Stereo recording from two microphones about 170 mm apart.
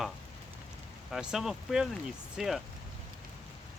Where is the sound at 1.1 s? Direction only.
5° right (ahead or behind).